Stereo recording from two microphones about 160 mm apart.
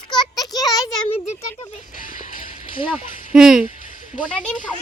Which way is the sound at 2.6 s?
30° left (ahead or behind).